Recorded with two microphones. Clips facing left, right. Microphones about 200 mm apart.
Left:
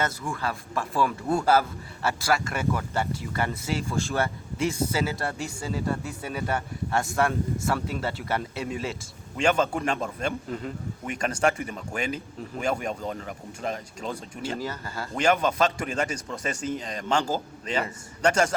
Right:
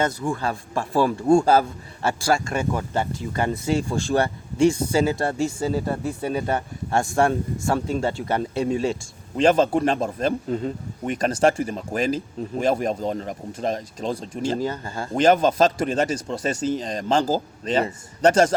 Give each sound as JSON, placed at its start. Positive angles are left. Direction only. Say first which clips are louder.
{"t": 0.2, "sound": "a man's voice", "louder": "right 6 dB", "side_deg": -30}
{"t": 15.2, "sound": "a man's voice", "louder": "right 6 dB", "side_deg": -35}